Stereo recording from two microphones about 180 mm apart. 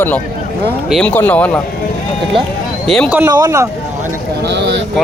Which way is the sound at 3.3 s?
15° right (ahead or behind).